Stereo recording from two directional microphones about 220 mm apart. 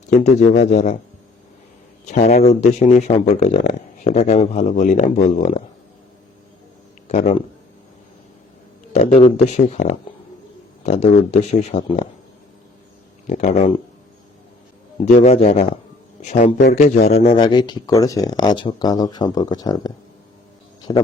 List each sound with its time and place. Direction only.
0.1 s speech: 30° left (ahead or behind)
2.0 s speech: 35° left (ahead or behind)
7.1 s speech: 30° left (ahead or behind)
9.2 s a man's voice: 30° left (ahead or behind)
13.2 s speech: 35° left (ahead or behind)
15.0 s a man's voice: 30° left (ahead or behind)
17.2 s speech: 20° left (ahead or behind)
20.9 s speech: 20° left (ahead or behind)